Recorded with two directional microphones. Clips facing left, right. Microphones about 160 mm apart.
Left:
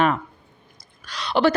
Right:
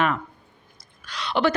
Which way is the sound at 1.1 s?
35° left (ahead or behind).